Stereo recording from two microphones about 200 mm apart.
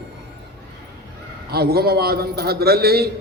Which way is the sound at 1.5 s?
50° right (ahead or behind).